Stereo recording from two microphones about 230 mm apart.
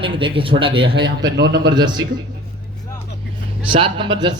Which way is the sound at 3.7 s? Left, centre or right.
Right.